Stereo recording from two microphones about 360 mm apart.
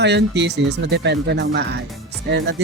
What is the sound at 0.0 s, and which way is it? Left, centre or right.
Speech, right.